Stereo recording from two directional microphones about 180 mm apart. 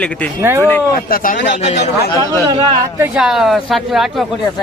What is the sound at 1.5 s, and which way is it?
Speech, 40° left (ahead or behind).